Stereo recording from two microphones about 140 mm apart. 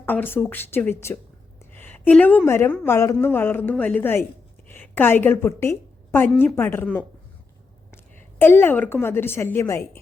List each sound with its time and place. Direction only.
0.0 s a woman's voice: 15° left (ahead or behind)
8.4 s a woman's voice: 15° left (ahead or behind)